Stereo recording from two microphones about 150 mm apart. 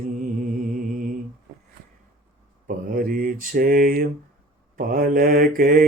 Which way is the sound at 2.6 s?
65° right (ahead or behind).